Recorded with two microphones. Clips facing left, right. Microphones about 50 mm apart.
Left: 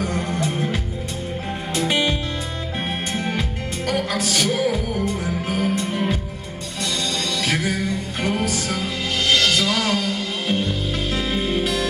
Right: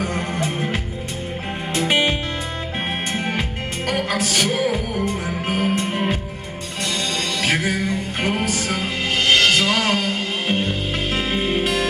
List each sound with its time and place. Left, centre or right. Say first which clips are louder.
0.0 s music: even; right
1.8 s music: right 2 dB; right
5.0 s music: even; right
7.4 s music: right 3 dB; right